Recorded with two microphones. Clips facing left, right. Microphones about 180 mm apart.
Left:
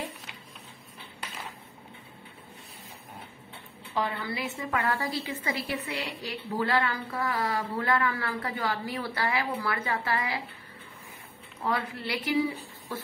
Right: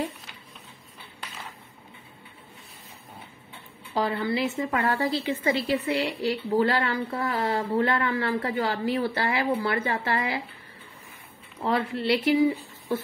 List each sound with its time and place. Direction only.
3.9 s a woman's voice: 35° right (ahead or behind)
11.6 s a woman's voice: 25° right (ahead or behind)